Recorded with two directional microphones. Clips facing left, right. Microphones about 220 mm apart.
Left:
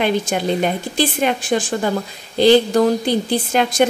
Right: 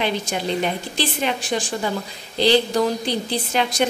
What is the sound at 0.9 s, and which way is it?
A woman's voice, 50° left (ahead or behind).